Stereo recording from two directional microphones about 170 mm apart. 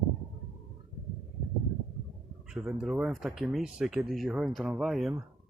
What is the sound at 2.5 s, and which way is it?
Speech, centre (ahead or behind).